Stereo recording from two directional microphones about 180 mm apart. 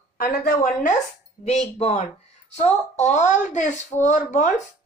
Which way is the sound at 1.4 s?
40° left (ahead or behind).